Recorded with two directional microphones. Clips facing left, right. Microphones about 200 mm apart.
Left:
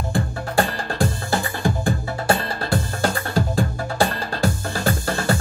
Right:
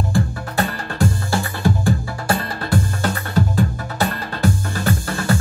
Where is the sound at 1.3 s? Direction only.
20° left (ahead or behind).